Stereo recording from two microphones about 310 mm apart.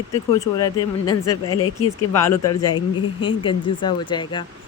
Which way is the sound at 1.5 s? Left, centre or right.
Left.